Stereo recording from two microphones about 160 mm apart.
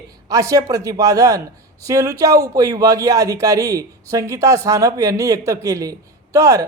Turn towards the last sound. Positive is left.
turn(degrees=-20)  # may be behind; listen again after turning